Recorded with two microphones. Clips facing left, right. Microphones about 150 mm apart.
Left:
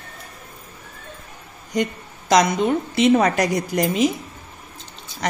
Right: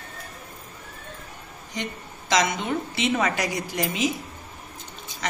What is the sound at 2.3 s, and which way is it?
A woman's voice, 45° left (ahead or behind).